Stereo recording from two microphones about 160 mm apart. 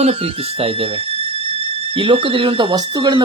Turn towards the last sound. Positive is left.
turn(degrees=-25)  # may be behind; listen again after turning